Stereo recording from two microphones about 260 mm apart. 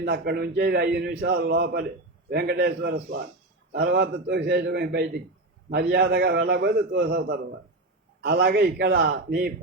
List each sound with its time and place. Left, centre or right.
0.0 s a man's voice: right